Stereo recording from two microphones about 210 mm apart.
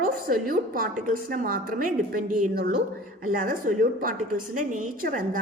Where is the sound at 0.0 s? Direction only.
40° right (ahead or behind).